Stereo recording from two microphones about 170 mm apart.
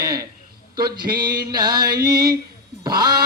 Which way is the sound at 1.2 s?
25° right (ahead or behind).